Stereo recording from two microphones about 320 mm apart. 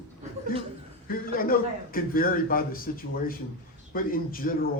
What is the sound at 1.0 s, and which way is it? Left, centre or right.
A man's voice, left.